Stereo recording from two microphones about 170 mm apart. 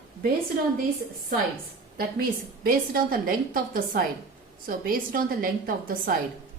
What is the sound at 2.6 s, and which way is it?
A woman's voice, 55° right (ahead or behind).